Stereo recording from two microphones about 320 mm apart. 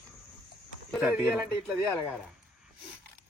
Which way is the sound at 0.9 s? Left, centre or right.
Centre.